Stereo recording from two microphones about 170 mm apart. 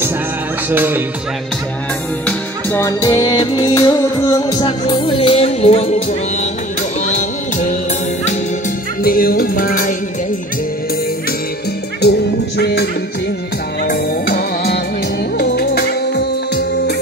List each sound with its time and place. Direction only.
0.7 s music: 10° right (ahead or behind)
2.2 s music: 15° left (ahead or behind); by 6.0 s 40° left (ahead or behind)
7.1 s music: 45° left (ahead or behind)
9.0 s music: 60° left (ahead or behind)
12.0 s music: 75° left (ahead or behind)
13.8 s music: 60° left (ahead or behind)